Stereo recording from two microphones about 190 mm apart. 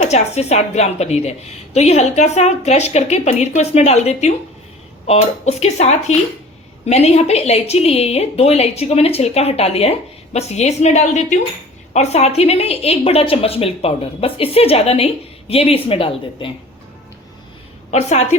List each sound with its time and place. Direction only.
0.0 s a woman's voice: 35° left (ahead or behind)
17.9 s a woman's voice: 35° left (ahead or behind)